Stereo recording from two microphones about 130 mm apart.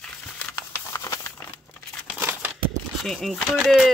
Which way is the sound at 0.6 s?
20° left (ahead or behind).